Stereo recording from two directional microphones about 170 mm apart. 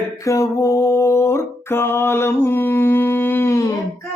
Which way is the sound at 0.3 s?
20° left (ahead or behind).